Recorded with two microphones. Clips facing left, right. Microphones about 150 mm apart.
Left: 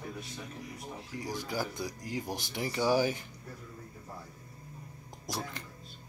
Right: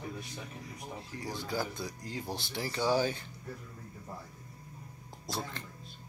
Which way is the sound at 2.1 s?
15° left (ahead or behind).